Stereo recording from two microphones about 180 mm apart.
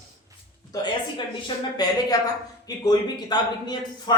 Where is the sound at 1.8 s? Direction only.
25° left (ahead or behind).